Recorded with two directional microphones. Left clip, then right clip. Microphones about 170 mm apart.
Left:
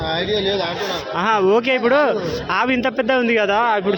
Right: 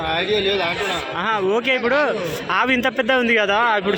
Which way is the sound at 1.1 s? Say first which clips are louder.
Left 6 dB; 25° left (ahead or behind).